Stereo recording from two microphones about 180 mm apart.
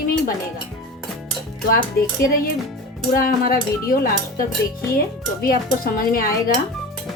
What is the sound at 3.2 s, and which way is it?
Cutlery, 55° left (ahead or behind).